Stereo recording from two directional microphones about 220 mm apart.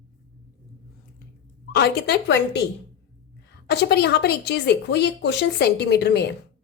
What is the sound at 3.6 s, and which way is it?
Speech, 50° left (ahead or behind).